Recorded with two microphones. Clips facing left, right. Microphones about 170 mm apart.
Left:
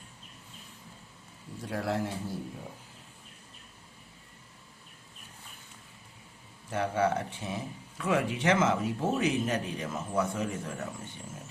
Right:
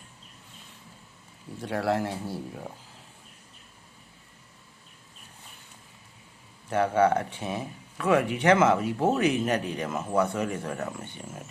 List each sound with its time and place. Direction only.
1.6 s speech: 75° right (ahead or behind)
6.7 s speech: 60° right (ahead or behind)